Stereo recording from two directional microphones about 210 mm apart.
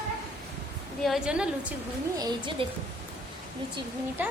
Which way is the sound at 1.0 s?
Centre (ahead or behind).